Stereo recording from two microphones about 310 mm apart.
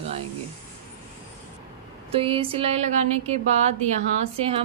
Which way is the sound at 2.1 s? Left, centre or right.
Centre.